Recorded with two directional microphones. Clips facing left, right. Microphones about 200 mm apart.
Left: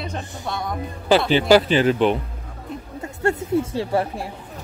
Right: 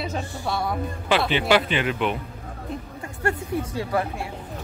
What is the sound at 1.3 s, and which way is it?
Speech, 35° left (ahead or behind).